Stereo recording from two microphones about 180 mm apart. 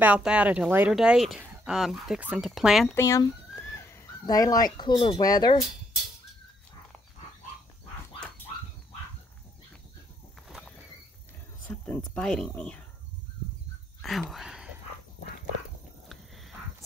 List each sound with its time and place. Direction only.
0.0 s speech: 5° right (ahead or behind)
2.9 s speech: 15° left (ahead or behind)
10.5 s a sound: 5° right (ahead or behind)
11.6 s speech: 10° left (ahead or behind)
14.3 s speech: 5° right (ahead or behind)
16.1 s a sound: centre (ahead or behind)